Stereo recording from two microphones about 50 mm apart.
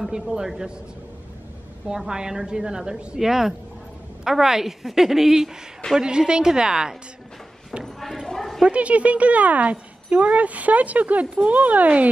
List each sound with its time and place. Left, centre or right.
0.1 s a woman's voice: centre
2.0 s a woman's voice: centre
7.8 s a sound: centre
8.3 s bow-wow: centre
8.6 s speech: right